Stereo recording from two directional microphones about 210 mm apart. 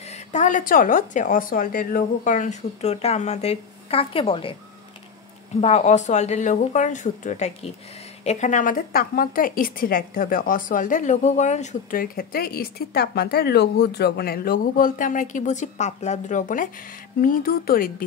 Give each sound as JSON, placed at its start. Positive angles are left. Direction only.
{"t": 0.0, "sound": "a woman's voice", "side_deg": 35}
{"t": 5.6, "sound": "a woman's voice", "side_deg": 30}